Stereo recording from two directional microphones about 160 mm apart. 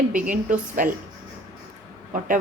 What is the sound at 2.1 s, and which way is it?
Speech, 60° right (ahead or behind).